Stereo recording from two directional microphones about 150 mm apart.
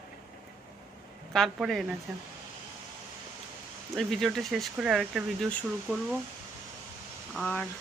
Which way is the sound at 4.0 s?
Centre (ahead or behind).